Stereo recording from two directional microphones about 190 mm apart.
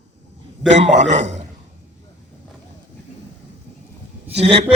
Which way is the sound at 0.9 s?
40° right (ahead or behind).